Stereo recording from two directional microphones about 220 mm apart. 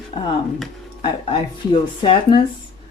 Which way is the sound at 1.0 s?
20° left (ahead or behind).